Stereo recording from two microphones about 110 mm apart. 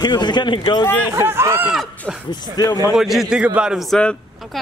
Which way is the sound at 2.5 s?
35° left (ahead or behind).